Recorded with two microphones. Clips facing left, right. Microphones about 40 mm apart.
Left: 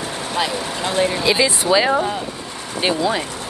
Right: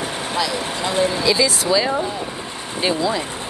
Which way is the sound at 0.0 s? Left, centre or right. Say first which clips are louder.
Right 1 dB; right.